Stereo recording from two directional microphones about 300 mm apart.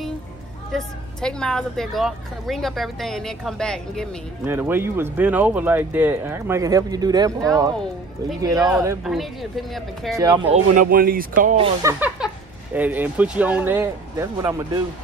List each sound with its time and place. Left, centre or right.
0.7 s speech: centre
10.1 s speech: centre
10.8 s speech: right; by 14.8 s centre